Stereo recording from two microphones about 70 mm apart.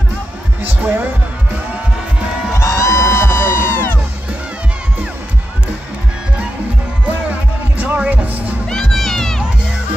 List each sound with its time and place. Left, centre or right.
0.6 s heart sounds: right
2.5 s music: left
7.1 s music: right
8.6 s music: centre